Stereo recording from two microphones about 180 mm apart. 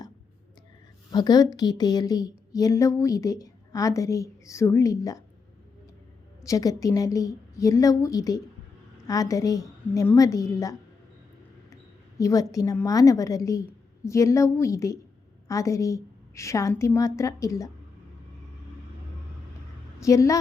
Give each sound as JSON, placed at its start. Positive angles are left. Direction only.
{"t": 1.1, "sound": "speech", "side_deg": 20}
{"t": 6.4, "sound": "speech", "side_deg": 20}
{"t": 12.2, "sound": "a woman's voice", "side_deg": 20}
{"t": 20.0, "sound": "a woman's voice", "side_deg": 15}